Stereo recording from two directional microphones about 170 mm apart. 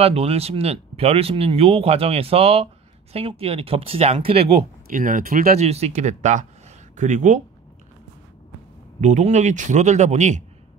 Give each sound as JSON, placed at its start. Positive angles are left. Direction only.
{"t": 0.0, "sound": "speech", "side_deg": -35}
{"t": 4.9, "sound": "speech", "side_deg": -50}
{"t": 5.6, "sound": "speech", "side_deg": -40}
{"t": 9.0, "sound": "speech", "side_deg": -45}